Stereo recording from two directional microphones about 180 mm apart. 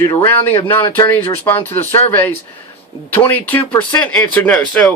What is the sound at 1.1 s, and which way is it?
Speech, 10° left (ahead or behind).